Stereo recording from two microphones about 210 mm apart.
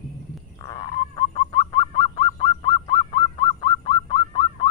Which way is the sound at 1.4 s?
25° left (ahead or behind).